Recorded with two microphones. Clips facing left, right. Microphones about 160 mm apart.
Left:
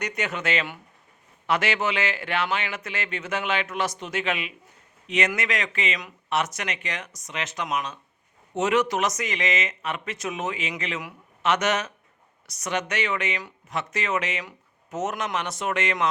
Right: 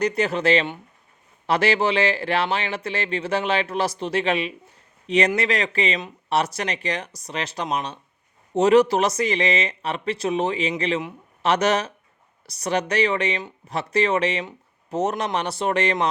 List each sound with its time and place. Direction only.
0.0 s speech: 30° right (ahead or behind)